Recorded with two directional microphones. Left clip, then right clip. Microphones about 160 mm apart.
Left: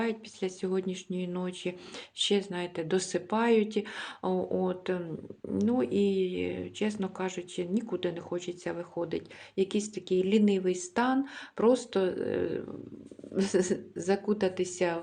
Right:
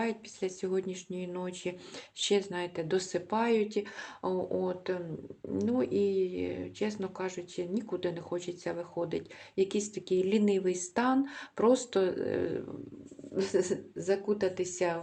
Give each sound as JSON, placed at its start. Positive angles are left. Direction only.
{"t": 0.0, "sound": "speech", "side_deg": 15}
{"t": 13.3, "sound": "speech", "side_deg": 25}